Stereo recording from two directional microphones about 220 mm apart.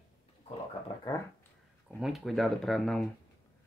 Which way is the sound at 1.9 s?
Centre (ahead or behind).